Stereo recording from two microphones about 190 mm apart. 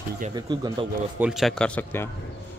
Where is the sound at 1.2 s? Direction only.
Centre (ahead or behind).